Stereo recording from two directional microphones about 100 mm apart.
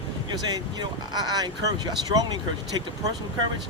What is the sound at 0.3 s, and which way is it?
Speech, 45° right (ahead or behind).